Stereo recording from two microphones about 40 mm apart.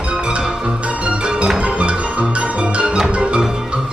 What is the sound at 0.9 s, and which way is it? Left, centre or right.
Music, right.